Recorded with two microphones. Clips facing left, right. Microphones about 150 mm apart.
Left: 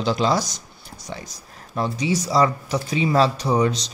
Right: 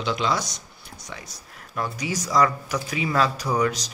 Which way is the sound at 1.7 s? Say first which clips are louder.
Left 5 dB; 25° left (ahead or behind).